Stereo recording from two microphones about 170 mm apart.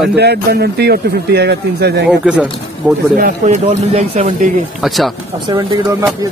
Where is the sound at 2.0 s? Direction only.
5° right (ahead or behind).